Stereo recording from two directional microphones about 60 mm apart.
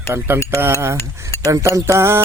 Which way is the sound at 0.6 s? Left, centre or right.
Right.